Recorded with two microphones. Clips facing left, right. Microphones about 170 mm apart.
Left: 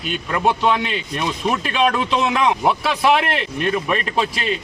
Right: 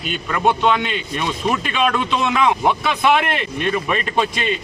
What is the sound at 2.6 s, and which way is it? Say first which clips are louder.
A man's voice: even; centre (ahead or behind).